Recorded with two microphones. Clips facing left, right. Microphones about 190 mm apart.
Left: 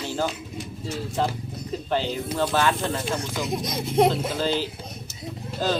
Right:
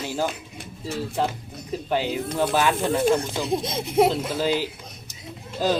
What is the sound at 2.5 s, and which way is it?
Speech, 15° right (ahead or behind).